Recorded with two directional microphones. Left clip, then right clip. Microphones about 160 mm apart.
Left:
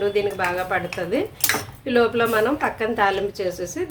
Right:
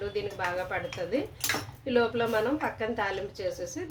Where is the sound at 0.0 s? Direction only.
25° left (ahead or behind).